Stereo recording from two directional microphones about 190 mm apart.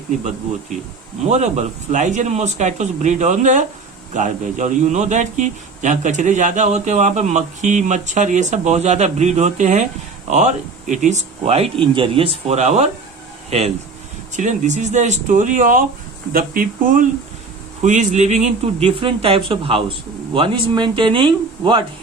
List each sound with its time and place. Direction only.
1.3 s a man's voice: 35° right (ahead or behind)
14.3 s a man's voice: 40° right (ahead or behind)